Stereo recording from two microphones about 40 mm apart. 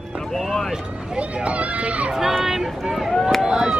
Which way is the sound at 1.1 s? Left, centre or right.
Right.